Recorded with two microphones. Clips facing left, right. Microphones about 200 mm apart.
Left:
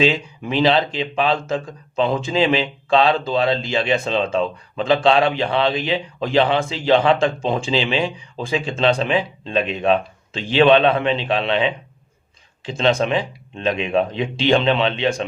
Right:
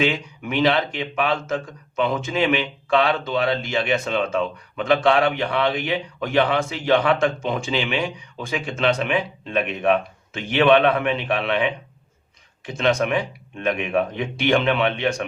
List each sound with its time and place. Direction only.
0.0 s speech: 25° left (ahead or behind)